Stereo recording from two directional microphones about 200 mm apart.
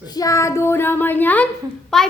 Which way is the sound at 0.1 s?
15° left (ahead or behind).